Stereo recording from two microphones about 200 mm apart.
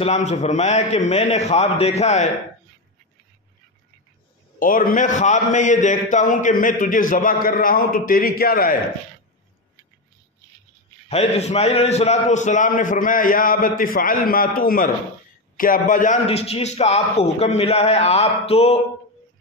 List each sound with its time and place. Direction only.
0.0 s a man's voice: 35° left (ahead or behind)
4.6 s a man's voice: 45° left (ahead or behind)
11.1 s a man's voice: 35° left (ahead or behind)